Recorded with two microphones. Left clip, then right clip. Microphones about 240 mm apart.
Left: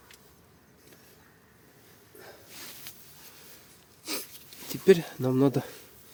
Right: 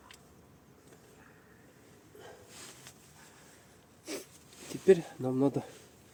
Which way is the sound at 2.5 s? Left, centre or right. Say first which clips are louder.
Left 5 dB; left.